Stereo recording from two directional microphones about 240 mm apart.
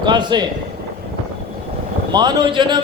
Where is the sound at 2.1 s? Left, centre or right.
Centre.